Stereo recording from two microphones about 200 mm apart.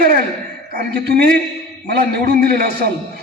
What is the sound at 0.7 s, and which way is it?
A man's voice, 50° right (ahead or behind).